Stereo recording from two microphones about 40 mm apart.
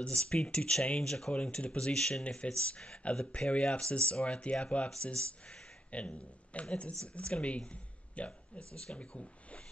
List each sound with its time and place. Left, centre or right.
0.0 s speech: left
1.0 s speech: centre
1.3 s a man's voice: left